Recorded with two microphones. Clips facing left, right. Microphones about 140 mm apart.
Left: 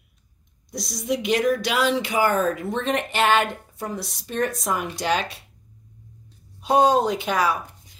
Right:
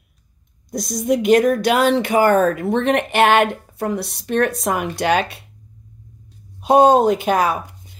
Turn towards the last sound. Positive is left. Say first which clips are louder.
# right 6 dB
turn(degrees=-50)  # may be behind; listen again after turning